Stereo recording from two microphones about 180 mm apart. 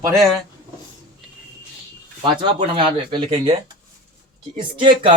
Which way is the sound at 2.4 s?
25° right (ahead or behind).